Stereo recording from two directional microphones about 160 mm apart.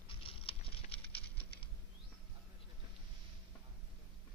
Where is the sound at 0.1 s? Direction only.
35° left (ahead or behind).